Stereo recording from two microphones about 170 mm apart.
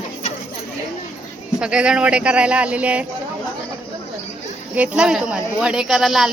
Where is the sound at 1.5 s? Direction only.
5° right (ahead or behind).